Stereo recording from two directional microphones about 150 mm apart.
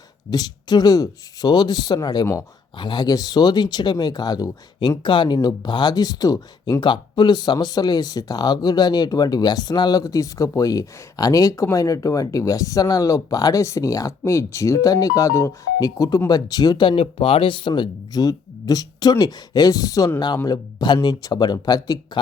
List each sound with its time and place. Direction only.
0.3 s speech: 25° left (ahead or behind)